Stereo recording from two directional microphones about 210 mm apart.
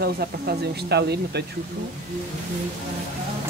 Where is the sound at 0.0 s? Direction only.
50° right (ahead or behind).